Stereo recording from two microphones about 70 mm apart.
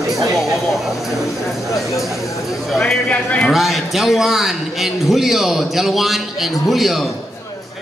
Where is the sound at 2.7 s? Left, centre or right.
Centre.